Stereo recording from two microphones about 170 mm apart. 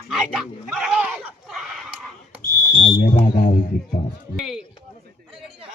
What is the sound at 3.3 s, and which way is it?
Speech, 50° left (ahead or behind).